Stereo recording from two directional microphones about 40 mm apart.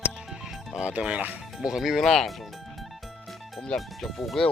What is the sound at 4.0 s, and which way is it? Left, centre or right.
Speech, centre.